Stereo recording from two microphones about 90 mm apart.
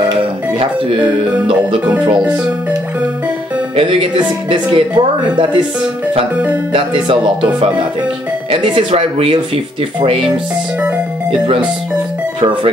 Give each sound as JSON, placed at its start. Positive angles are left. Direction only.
{"t": 0.2, "sound": "music", "side_deg": -85}
{"t": 3.7, "sound": "speech", "side_deg": -85}
{"t": 4.9, "sound": "speech", "side_deg": -55}
{"t": 6.7, "sound": "speech", "side_deg": -70}